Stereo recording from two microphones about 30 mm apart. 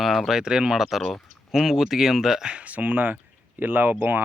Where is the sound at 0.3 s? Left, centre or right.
Right.